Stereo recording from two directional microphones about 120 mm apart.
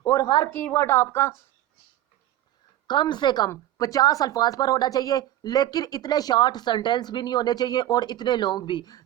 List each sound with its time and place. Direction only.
0.0 s a woman's voice: 25° left (ahead or behind)
0.5 s a woman's voice: 15° left (ahead or behind)
2.8 s speech: 40° left (ahead or behind)